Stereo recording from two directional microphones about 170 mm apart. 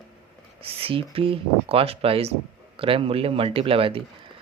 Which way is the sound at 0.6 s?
35° right (ahead or behind).